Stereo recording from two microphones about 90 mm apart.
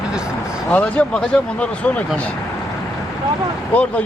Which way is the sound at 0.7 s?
15° left (ahead or behind).